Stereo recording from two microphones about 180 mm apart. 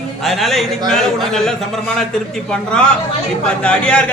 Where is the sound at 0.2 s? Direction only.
Centre (ahead or behind).